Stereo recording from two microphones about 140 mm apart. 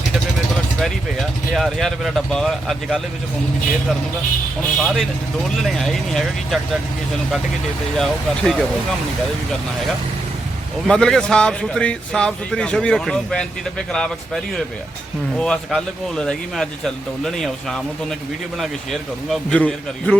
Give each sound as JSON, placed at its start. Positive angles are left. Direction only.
{"t": 1.5, "sound": "a man's voice", "side_deg": 0}
{"t": 4.8, "sound": "a man's voice", "side_deg": 0}
{"t": 7.9, "sound": "a man's voice", "side_deg": 5}
{"t": 10.8, "sound": "a man's voice", "side_deg": 5}
{"t": 15.4, "sound": "a man's voice", "side_deg": 5}